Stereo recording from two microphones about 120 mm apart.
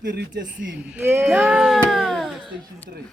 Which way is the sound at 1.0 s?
20° right (ahead or behind).